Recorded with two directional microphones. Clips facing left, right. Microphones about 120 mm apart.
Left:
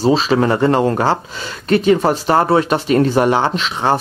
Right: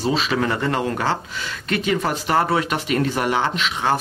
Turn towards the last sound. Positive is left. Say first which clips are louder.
# left 4 dB
turn(degrees=35)  # may be behind; listen again after turning